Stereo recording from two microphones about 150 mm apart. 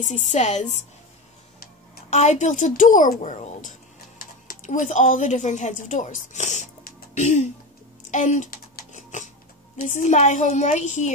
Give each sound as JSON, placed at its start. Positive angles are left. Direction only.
{"t": 0.0, "sound": "speech", "side_deg": 50}
{"t": 2.0, "sound": "a child's voice", "side_deg": 50}
{"t": 8.9, "sound": "a sound", "side_deg": 55}
{"t": 9.8, "sound": "speech", "side_deg": 55}